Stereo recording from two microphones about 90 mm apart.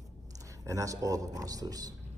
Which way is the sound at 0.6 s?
40° right (ahead or behind).